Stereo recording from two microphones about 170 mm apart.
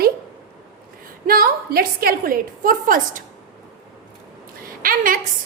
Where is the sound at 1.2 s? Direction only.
60° right (ahead or behind).